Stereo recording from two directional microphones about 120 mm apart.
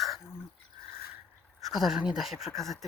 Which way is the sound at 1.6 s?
5° right (ahead or behind).